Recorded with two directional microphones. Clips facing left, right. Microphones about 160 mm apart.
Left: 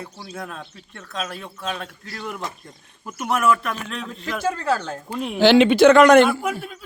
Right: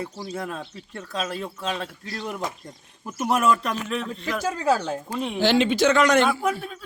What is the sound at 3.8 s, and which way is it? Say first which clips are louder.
A man's voice: right 2 dB; centre (ahead or behind).